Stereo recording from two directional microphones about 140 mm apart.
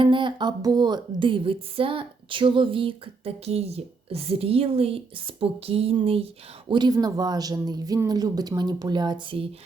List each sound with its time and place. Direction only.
0.0 s speech: 35° right (ahead or behind)
6.7 s speech: 30° right (ahead or behind)